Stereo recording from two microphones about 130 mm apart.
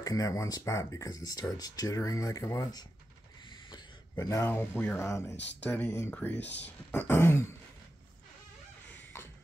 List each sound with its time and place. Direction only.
0.0 s speech: 25° left (ahead or behind)
3.7 s a sound: 25° left (ahead or behind)
4.6 s speech: 15° left (ahead or behind)